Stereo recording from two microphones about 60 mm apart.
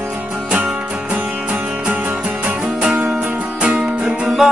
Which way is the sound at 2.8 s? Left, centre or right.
Right.